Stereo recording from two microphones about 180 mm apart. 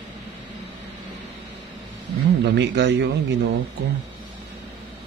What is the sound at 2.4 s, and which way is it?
A man's voice, 70° right (ahead or behind).